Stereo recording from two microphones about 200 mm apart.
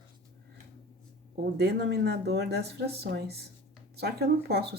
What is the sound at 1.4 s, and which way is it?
Speech, 60° right (ahead or behind).